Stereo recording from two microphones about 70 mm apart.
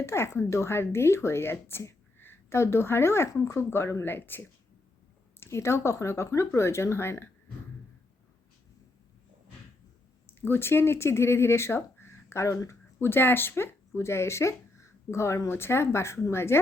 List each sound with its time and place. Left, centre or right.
0.0 s speech: left
10.2 s speech: left